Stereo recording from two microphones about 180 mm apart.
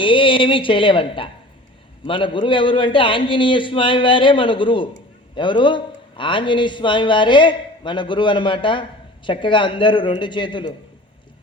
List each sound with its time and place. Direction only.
0.0 s a man's voice: 30° left (ahead or behind)